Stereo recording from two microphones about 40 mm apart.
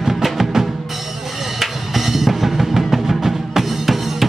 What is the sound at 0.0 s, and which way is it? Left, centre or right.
Music, centre.